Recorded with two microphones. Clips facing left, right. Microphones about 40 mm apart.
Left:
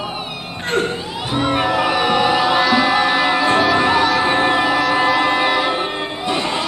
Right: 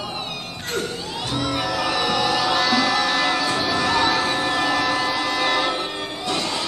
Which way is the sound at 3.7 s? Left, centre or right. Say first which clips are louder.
Left 6 dB; left.